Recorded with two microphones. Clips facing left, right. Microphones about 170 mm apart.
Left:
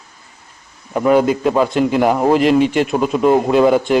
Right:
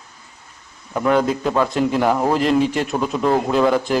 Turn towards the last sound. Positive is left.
turn(degrees=5)  # may be behind; listen again after turning